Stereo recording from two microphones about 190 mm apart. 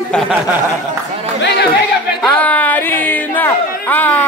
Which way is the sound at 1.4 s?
65° left (ahead or behind).